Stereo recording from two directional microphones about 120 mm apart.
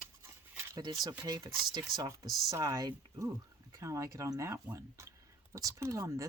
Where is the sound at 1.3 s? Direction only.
35° right (ahead or behind).